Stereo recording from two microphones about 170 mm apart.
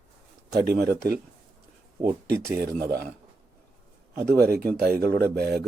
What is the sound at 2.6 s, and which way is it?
Speech, 65° right (ahead or behind).